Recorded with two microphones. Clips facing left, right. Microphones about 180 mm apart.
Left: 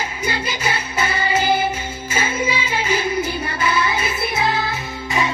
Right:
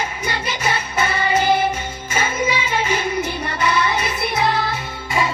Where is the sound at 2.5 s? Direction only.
30° left (ahead or behind).